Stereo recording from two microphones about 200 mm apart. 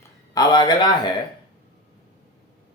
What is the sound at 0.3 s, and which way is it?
Speech, 20° left (ahead or behind).